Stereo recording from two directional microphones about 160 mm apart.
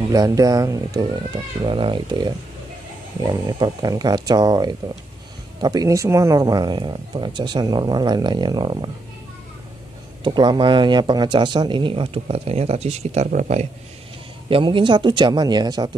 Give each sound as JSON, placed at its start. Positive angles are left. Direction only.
{"t": 0.1, "sound": "speech", "side_deg": -20}
{"t": 10.2, "sound": "speech", "side_deg": -30}
{"t": 14.5, "sound": "speech", "side_deg": -30}